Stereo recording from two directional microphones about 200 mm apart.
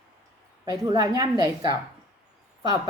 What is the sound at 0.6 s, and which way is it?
A woman's voice, 20° right (ahead or behind).